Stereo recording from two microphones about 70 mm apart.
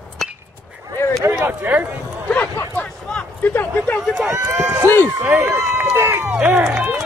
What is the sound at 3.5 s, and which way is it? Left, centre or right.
Speech, left.